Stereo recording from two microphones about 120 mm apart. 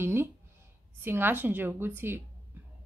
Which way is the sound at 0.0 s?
20° right (ahead or behind).